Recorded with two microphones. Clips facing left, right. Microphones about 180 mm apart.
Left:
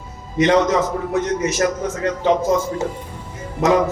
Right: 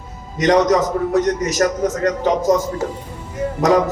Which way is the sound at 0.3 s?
40° right (ahead or behind).